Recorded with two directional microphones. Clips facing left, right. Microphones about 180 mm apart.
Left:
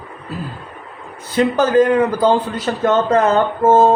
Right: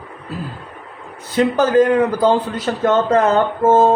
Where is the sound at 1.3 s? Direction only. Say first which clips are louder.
Even; 50° right (ahead or behind).